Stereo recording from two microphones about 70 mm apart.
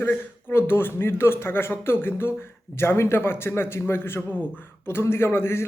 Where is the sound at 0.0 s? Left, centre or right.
Left.